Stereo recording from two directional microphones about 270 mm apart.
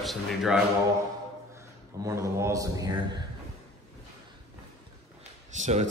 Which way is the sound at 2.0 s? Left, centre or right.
Centre.